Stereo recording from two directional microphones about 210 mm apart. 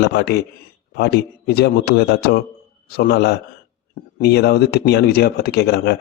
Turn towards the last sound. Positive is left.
turn(degrees=50)  # may be behind; listen again after turning